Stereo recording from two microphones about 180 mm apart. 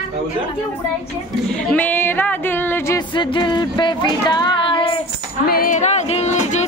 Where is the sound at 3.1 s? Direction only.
25° left (ahead or behind).